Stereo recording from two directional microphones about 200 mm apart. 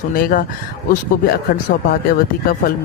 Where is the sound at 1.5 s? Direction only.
50° left (ahead or behind).